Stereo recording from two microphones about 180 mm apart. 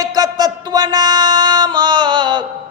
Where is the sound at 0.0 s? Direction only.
20° right (ahead or behind).